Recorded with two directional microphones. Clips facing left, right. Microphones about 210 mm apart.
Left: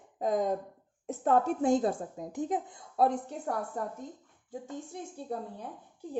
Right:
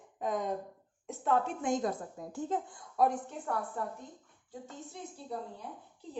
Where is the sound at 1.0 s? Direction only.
40° left (ahead or behind); by 2.6 s 15° left (ahead or behind).